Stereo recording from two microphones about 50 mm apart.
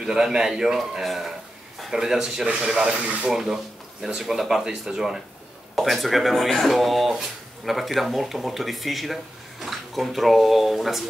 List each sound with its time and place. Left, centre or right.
0.0 s speech: centre
3.0 s speech: right
3.3 s speech: centre
5.8 s speech: centre